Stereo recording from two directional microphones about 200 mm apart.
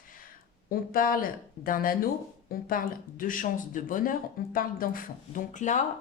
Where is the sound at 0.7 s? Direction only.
45° left (ahead or behind).